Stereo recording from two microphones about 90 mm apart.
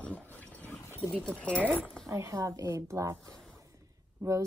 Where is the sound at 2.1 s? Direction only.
35° right (ahead or behind).